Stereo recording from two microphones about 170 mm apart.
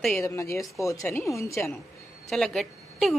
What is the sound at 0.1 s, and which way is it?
A woman's voice, 15° left (ahead or behind).